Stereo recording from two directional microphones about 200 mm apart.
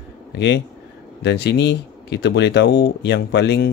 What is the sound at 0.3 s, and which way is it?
Speech, 55° left (ahead or behind).